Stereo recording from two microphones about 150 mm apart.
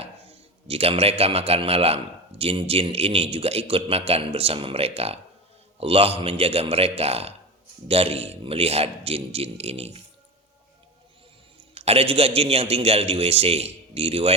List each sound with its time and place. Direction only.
0.0 s a man's voice: 40° right (ahead or behind)
11.7 s a man's voice: 40° right (ahead or behind)